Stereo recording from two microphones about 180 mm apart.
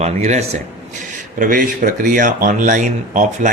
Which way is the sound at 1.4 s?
50° right (ahead or behind).